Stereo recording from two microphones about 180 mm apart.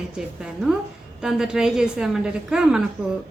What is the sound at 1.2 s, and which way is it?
A woman's voice, 5° right (ahead or behind).